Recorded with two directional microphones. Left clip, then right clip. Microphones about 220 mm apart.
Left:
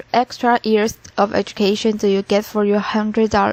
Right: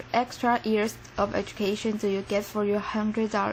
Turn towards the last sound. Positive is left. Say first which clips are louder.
# left 11 dB
turn(degrees=35)  # may be behind; listen again after turning